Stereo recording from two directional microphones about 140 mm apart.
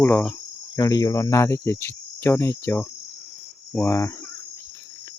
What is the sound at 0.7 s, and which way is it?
Cricket, 25° left (ahead or behind).